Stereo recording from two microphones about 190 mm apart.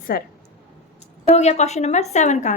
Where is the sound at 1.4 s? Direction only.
35° left (ahead or behind).